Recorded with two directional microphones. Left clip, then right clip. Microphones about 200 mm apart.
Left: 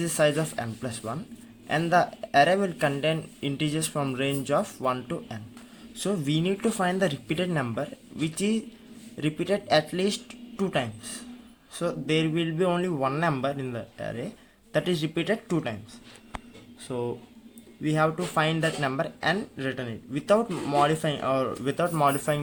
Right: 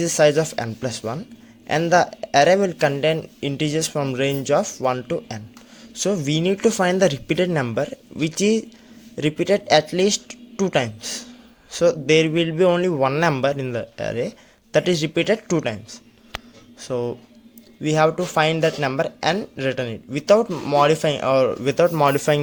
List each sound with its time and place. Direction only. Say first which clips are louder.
0.0 s speech: right 8 dB; 30° right (ahead or behind)